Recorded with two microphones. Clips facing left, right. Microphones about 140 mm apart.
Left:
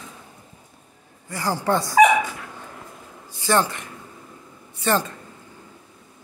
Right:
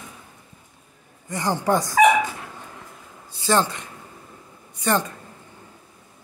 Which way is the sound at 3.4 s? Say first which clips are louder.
Even; 20° right (ahead or behind).